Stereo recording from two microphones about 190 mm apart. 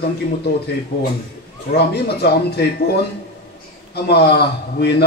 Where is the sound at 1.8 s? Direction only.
60° left (ahead or behind).